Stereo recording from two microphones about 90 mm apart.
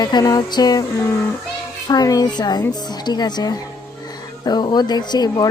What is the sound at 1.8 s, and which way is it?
Speech, 45° left (ahead or behind).